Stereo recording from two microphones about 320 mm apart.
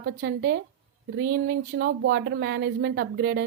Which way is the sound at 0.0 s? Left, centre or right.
Right.